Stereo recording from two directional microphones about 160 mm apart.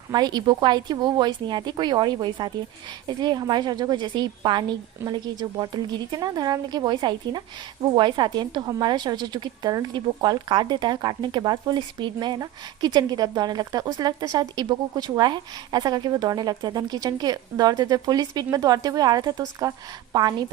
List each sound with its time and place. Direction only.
0.1 s a woman's voice: 25° right (ahead or behind)